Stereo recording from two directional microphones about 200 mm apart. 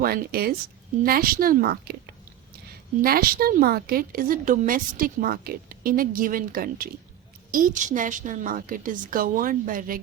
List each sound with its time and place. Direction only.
0.0 s a woman's voice: 50° right (ahead or behind)